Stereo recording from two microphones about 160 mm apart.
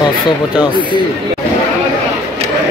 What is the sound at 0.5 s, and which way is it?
Speech, 30° left (ahead or behind).